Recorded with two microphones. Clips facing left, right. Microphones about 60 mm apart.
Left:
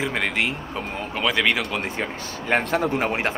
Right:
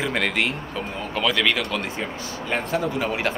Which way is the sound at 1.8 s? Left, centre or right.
Left.